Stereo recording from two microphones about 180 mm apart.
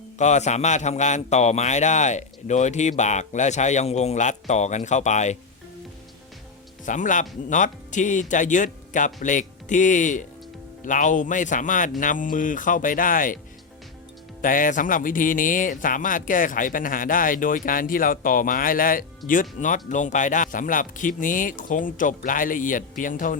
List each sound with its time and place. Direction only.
0.2 s a man's voice: 40° left (ahead or behind)
6.8 s speech: 45° left (ahead or behind)
14.4 s speech: 50° left (ahead or behind)